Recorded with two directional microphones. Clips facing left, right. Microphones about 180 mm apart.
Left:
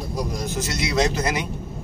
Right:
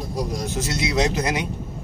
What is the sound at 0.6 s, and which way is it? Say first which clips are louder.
Speech: even; 20° right (ahead or behind).